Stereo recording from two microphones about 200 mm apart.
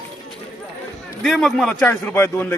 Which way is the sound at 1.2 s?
Centre (ahead or behind).